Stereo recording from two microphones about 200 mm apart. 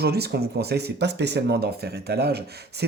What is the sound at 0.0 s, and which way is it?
Speech, 55° right (ahead or behind).